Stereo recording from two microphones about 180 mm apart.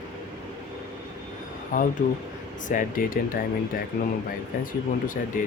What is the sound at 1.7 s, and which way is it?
Speech, 50° left (ahead or behind).